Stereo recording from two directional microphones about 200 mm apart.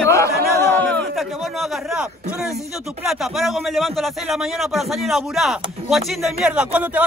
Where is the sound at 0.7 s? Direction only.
5° left (ahead or behind).